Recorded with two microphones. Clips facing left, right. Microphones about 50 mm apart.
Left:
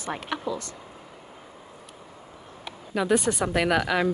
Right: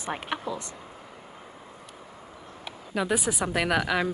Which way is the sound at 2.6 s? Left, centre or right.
Centre.